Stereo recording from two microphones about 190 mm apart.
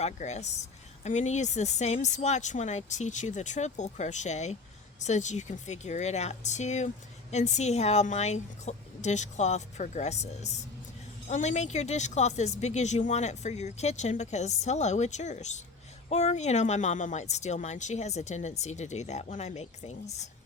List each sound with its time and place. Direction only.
0.0 s speech: 35° left (ahead or behind)